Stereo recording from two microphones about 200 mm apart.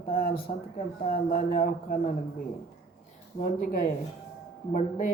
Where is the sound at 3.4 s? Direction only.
45° left (ahead or behind).